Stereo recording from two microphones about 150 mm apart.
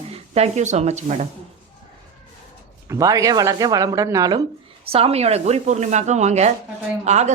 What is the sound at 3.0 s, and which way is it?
Speech, 25° right (ahead or behind).